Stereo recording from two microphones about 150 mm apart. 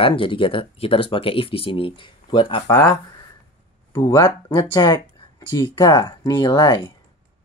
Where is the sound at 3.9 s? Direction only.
20° left (ahead or behind).